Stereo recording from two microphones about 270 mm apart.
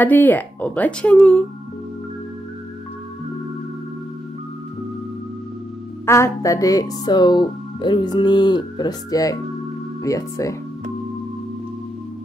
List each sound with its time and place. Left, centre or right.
0.0 s speech: centre
6.0 s speech: centre